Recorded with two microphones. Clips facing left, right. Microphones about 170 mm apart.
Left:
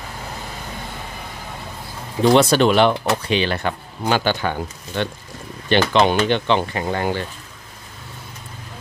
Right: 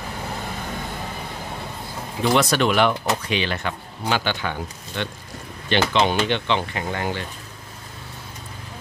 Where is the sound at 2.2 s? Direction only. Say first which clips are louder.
Left 5 dB; 30° left (ahead or behind).